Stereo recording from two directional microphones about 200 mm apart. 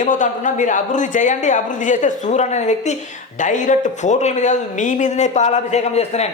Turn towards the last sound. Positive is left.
turn(degrees=30)  # may be behind; listen again after turning